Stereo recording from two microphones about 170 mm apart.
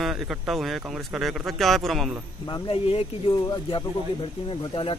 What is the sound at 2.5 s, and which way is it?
Speech, 30° left (ahead or behind).